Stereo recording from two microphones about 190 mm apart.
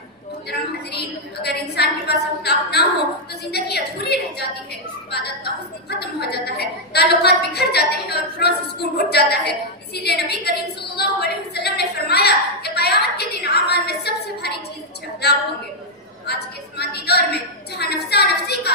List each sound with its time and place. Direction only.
1.4 s a woman's voice: 60° left (ahead or behind)
5.9 s a woman's voice: 60° left (ahead or behind)
9.9 s a sound: 60° left (ahead or behind)
16.2 s a woman's voice: 60° left (ahead or behind)